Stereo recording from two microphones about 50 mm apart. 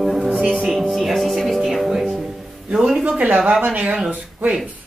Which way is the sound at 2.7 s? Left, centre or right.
Centre.